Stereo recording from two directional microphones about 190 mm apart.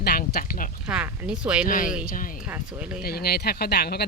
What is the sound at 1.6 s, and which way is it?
Speech, 45° left (ahead or behind).